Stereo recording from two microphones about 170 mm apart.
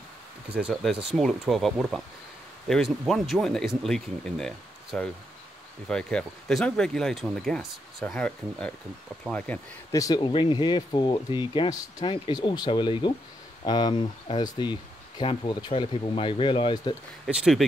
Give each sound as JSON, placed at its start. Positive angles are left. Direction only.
{"t": 0.5, "sound": "speech", "side_deg": -5}
{"t": 9.8, "sound": "speech", "side_deg": 20}
{"t": 17.3, "sound": "speech", "side_deg": -5}